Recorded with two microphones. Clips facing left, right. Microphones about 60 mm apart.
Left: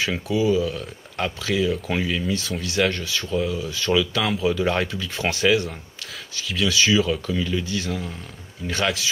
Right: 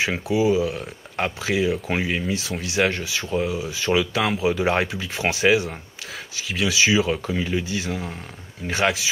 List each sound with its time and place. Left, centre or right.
0.0 s speech: right
2.6 s speech: centre
3.3 s speech: right
3.5 s speech: centre